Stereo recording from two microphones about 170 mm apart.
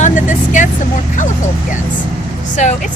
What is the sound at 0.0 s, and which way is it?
Speech, 50° left (ahead or behind).